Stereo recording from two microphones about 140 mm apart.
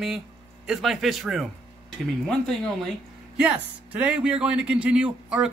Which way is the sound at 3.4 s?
10° right (ahead or behind).